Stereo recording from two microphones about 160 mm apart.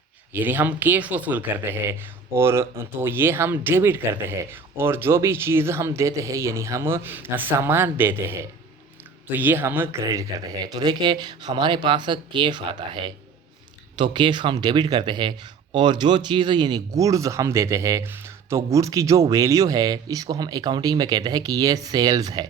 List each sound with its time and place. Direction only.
0.3 s speech: 10° right (ahead or behind)